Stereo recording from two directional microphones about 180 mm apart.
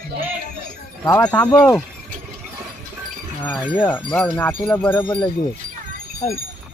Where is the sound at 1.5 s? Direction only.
20° left (ahead or behind).